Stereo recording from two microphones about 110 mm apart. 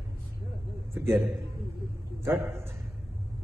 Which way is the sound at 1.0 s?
Centre (ahead or behind).